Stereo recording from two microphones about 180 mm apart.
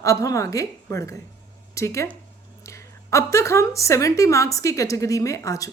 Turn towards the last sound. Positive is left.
turn(degrees=20)  # may be behind; listen again after turning